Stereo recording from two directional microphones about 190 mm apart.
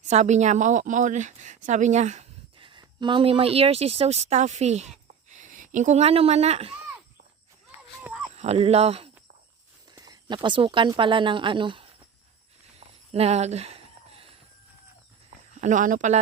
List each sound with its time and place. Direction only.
0.0 s a woman's voice: 35° right (ahead or behind)
8.1 s a sound: 10° right (ahead or behind)
8.4 s speech: 35° right (ahead or behind)
9.9 s speech: 20° right (ahead or behind)
13.1 s a sound: 35° right (ahead or behind)
15.4 s speech: 40° right (ahead or behind)